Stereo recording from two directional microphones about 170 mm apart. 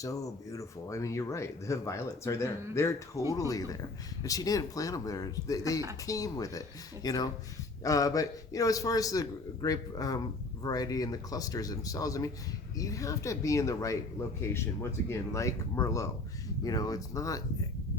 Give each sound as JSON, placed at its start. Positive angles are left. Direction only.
{"t": 0.0, "sound": "a man's voice", "side_deg": 20}